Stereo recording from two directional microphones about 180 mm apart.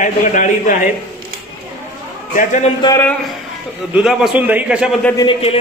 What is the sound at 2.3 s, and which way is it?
Speech, 50° left (ahead or behind).